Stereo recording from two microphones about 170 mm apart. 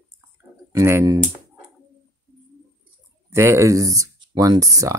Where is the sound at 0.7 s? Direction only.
15° right (ahead or behind).